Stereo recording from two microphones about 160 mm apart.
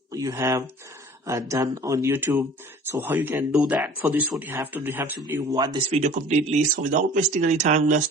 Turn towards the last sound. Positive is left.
turn(degrees=-50)  # may be behind; listen again after turning